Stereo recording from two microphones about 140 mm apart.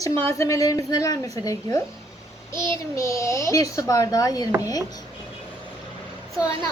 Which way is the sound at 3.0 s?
20° left (ahead or behind).